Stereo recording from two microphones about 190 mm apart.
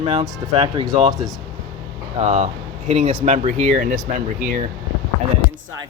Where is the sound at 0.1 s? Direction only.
30° right (ahead or behind).